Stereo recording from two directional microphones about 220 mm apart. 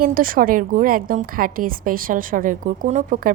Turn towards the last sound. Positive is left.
turn(degrees=-35)  # may be behind; listen again after turning